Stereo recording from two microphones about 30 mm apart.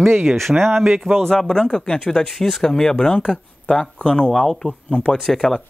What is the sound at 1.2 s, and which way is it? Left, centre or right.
Speech, centre.